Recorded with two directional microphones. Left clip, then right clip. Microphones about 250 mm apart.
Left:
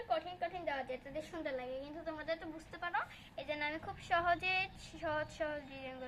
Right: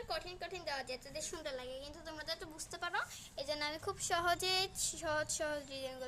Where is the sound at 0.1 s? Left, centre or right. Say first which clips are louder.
Left 6 dB; right.